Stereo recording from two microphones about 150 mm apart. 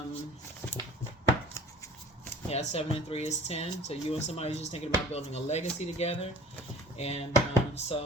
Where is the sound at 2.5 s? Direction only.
45° left (ahead or behind).